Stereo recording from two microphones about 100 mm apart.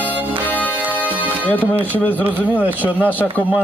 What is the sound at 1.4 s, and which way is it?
A man's voice, 15° left (ahead or behind).